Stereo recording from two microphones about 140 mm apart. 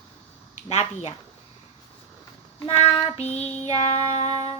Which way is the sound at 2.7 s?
40° left (ahead or behind).